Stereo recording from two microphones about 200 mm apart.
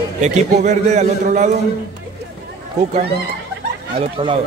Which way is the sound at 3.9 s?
25° right (ahead or behind).